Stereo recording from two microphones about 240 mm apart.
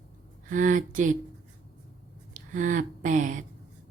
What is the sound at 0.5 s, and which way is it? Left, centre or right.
Speech, right.